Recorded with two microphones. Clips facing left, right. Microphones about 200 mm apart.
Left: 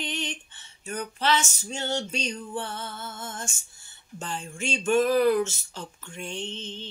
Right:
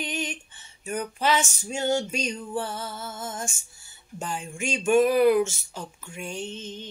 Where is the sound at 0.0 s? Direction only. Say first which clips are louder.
Right 2 dB; 10° right (ahead or behind).